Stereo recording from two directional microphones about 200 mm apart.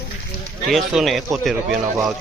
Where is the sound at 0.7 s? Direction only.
Centre (ahead or behind).